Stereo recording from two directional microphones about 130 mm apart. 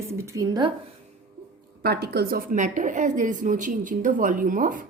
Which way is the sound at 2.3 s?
80° right.